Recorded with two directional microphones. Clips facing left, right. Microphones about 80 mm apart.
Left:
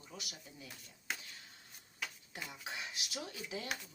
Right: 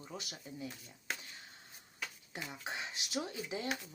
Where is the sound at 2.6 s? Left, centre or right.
Right.